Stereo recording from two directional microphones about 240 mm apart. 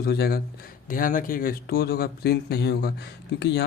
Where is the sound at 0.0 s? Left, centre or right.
Left.